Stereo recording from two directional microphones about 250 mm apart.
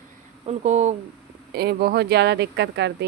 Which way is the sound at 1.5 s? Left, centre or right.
Right.